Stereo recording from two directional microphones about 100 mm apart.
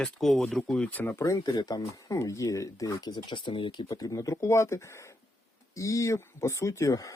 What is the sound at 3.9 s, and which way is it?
Speech, 35° left (ahead or behind).